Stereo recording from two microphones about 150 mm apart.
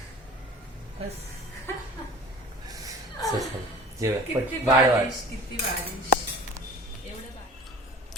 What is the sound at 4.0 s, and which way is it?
Speech, 20° right (ahead or behind).